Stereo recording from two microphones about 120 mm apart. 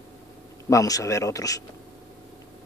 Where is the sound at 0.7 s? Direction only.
30° left (ahead or behind).